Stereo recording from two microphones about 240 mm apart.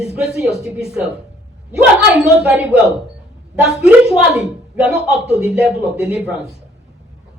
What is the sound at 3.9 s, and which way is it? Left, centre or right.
Speech, centre.